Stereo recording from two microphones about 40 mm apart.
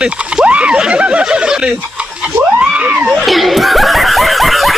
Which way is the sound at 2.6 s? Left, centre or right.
Right.